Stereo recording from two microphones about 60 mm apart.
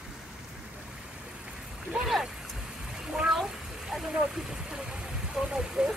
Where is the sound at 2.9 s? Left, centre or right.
Centre.